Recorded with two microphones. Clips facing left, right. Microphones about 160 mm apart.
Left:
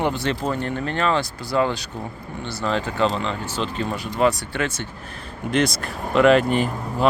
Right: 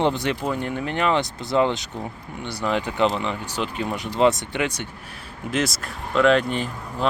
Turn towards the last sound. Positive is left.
turn(degrees=5)  # may be behind; listen again after turning